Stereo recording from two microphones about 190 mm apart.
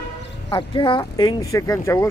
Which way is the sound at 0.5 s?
25° left (ahead or behind).